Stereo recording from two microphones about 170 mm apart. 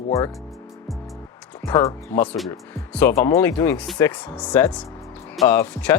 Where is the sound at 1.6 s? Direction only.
15° left (ahead or behind).